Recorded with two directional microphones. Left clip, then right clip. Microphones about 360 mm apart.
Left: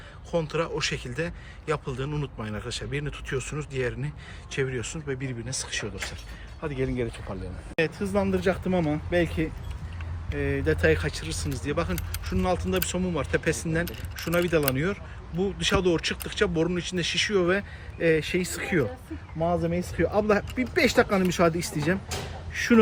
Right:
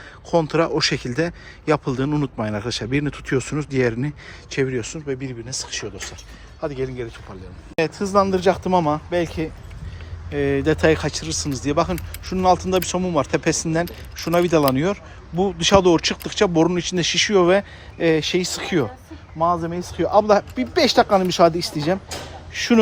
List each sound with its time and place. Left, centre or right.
0.3 s speech: centre
7.8 s speech: centre
10.3 s speech: centre
20.0 s speech: centre
22.1 s speech: right
22.5 s speech: centre